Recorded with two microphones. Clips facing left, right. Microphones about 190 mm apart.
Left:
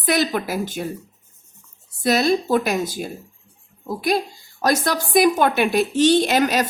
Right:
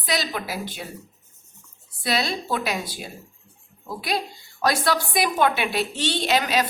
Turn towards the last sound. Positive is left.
turn(degrees=50)  # may be behind; listen again after turning